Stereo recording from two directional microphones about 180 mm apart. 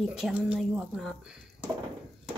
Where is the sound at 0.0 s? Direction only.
5° right (ahead or behind).